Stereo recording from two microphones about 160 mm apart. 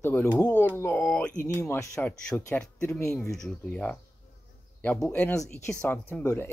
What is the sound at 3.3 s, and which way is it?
Speech, 5° left (ahead or behind).